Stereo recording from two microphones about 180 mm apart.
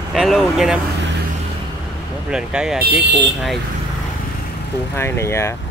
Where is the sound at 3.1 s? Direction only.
75° right (ahead or behind).